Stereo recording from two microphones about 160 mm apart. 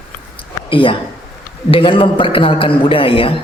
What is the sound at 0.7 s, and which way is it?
A woman's voice, 30° left (ahead or behind).